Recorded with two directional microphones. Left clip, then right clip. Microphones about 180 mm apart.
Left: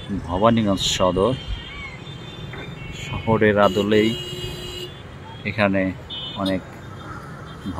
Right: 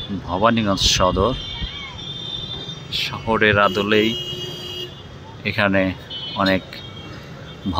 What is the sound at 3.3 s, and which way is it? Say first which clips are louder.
Speech: right 1 dB; 20° left (ahead or behind).